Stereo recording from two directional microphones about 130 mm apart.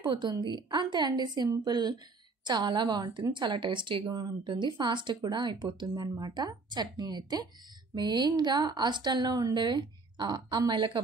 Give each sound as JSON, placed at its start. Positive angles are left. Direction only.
{"t": 0.1, "sound": "speech", "side_deg": -35}